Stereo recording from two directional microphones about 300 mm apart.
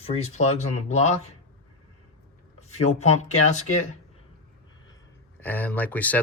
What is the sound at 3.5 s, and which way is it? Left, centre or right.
Speech, left.